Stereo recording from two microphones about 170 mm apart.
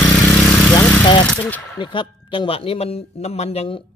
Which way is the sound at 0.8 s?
5° left (ahead or behind).